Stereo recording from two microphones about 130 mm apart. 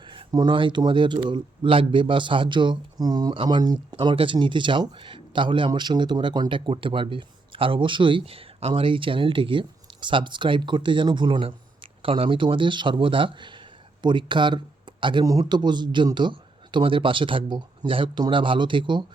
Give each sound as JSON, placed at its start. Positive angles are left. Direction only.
{"t": 0.0, "sound": "a man's voice", "side_deg": -40}